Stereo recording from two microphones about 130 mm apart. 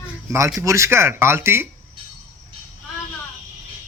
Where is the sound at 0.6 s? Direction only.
25° right (ahead or behind).